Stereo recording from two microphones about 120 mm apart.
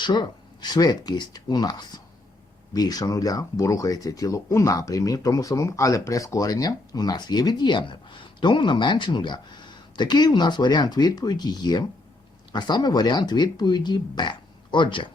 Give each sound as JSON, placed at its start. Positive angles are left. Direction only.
{"t": 0.0, "sound": "speech", "side_deg": 40}